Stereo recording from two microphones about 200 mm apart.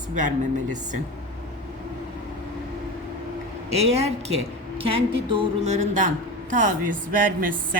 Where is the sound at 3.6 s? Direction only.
30° right (ahead or behind).